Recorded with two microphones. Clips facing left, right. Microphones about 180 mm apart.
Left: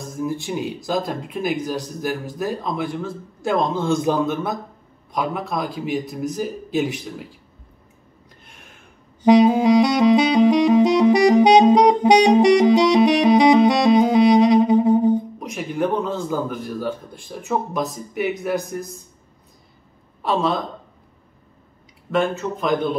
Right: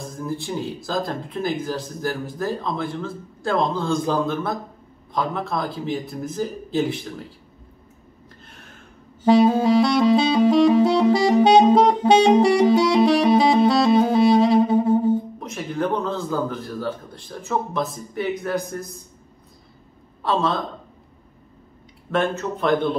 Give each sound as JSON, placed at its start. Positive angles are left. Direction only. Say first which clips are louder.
{"t": 0.2, "sound": "saxophone", "louder": "left 3 dB", "side_deg": 15}
{"t": 3.4, "sound": "speech", "louder": "left 2 dB", "side_deg": 20}
{"t": 5.1, "sound": "saxophone", "louder": "left 1 dB", "side_deg": 10}
{"t": 9.2, "sound": "saxophone", "louder": "left 2 dB", "side_deg": 15}
{"t": 20.2, "sound": "a man's voice", "louder": "left 1 dB", "side_deg": 15}
{"t": 22.4, "sound": "a man's voice", "louder": "right 1 dB", "side_deg": 0}